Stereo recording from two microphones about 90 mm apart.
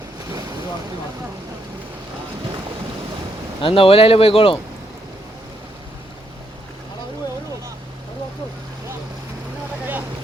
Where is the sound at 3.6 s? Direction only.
90° left.